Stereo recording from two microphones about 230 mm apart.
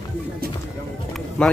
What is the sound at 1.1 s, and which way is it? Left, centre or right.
Music, centre.